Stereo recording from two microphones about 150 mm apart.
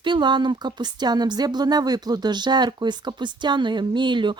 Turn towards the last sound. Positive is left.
turn(degrees=-30)  # may be behind; listen again after turning